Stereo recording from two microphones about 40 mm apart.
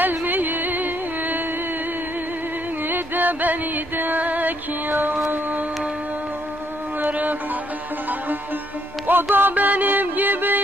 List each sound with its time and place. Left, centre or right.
0.0 s music: right
2.9 s music: right
7.0 s music: right
9.0 s music: right